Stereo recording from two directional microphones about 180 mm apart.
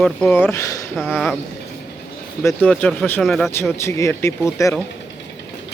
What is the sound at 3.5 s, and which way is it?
Speech, 15° left (ahead or behind).